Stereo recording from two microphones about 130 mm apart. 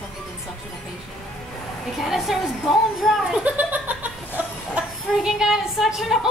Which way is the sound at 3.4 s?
10° right (ahead or behind).